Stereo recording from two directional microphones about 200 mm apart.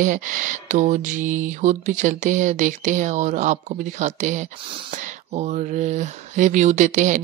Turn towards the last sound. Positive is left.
turn(degrees=-40)  # may be behind; listen again after turning